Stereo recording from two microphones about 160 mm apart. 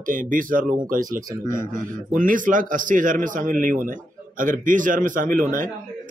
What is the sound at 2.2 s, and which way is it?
A man's voice, 55° right (ahead or behind).